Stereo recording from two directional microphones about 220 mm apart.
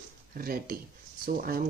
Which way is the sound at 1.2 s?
40° right (ahead or behind).